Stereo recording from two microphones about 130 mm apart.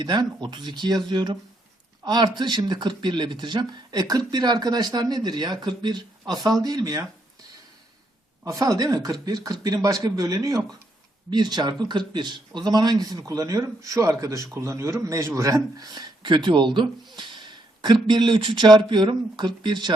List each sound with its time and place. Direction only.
0.0 s speech: 35° right (ahead or behind)
8.4 s a man's voice: 25° right (ahead or behind)